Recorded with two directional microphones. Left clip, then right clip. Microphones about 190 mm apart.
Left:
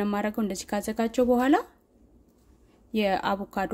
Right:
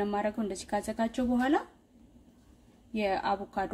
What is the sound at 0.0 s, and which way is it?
Speech, 50° left (ahead or behind).